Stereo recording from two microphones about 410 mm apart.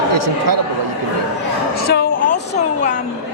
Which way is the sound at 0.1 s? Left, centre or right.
Right.